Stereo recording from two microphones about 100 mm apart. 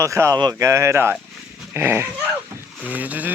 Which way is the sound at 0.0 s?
30° right (ahead or behind).